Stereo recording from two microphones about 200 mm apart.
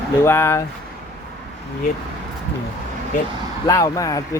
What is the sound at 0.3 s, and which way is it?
Speech, 10° left (ahead or behind).